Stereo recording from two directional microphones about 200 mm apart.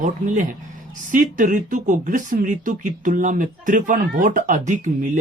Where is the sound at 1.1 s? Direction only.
40° right (ahead or behind).